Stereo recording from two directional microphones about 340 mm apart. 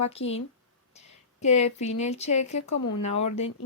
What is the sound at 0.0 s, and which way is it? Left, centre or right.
Speech, centre.